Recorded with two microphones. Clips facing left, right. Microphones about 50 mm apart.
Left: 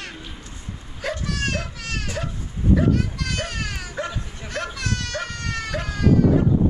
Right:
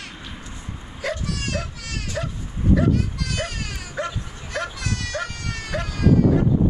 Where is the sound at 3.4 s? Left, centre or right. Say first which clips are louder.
Left 2 dB; left.